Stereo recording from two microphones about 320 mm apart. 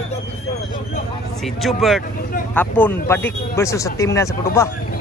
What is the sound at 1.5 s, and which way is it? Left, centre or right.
A man's voice, centre.